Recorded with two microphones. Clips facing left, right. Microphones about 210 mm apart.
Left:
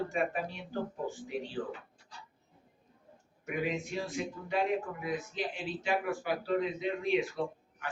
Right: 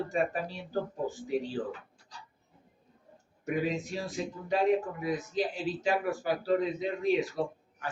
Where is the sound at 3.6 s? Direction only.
35° right (ahead or behind).